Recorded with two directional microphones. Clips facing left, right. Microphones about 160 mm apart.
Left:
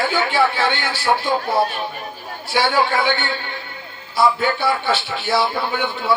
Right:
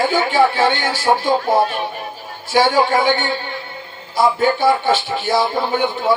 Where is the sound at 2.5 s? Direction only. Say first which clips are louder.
Right 4 dB; 45° right (ahead or behind).